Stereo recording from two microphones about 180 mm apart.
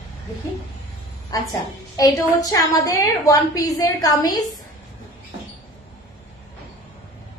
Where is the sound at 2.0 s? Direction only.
20° left (ahead or behind).